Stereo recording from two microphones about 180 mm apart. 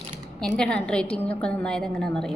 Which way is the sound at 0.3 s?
5° left (ahead or behind).